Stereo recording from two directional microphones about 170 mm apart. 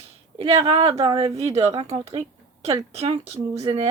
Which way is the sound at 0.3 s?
35° right (ahead or behind).